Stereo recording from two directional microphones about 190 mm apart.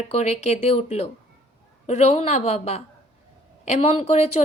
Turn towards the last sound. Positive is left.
turn(degrees=35)  # may be behind; listen again after turning